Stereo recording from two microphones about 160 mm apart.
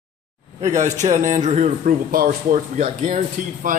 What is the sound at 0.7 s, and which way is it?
A man's voice, 50° right (ahead or behind).